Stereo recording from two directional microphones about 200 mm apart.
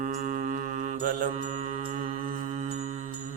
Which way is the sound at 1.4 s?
35° right (ahead or behind).